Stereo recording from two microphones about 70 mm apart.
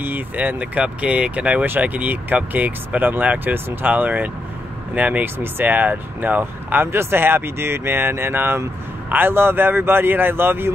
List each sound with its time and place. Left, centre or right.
0.0 s speech: right